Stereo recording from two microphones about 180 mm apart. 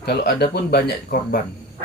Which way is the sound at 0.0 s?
65° left (ahead or behind).